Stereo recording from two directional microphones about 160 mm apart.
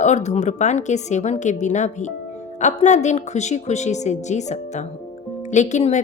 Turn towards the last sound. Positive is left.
turn(degrees=45)  # may be behind; listen again after turning